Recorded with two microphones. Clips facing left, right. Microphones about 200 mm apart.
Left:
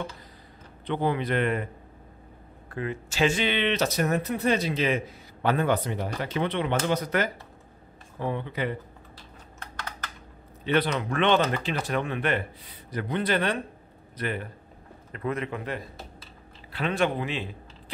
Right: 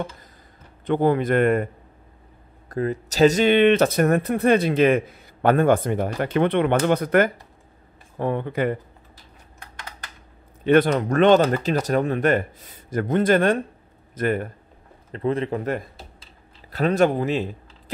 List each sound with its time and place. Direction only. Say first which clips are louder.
0.8 s speech: right 7 dB; 50° right (ahead or behind)
2.7 s speech: right 7 dB; 40° right (ahead or behind)
10.6 s speech: right 8 dB; 50° right (ahead or behind)
15.1 s a man's voice: right 7 dB; 30° right (ahead or behind)